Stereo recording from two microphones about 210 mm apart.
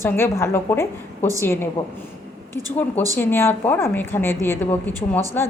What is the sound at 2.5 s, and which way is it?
Speech, 15° right (ahead or behind).